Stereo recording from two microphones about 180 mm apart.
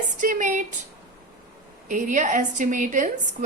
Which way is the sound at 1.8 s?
45° right (ahead or behind).